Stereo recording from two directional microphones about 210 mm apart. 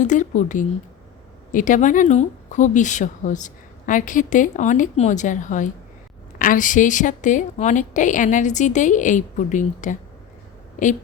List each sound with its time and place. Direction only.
0.0 s speech: 35° left (ahead or behind)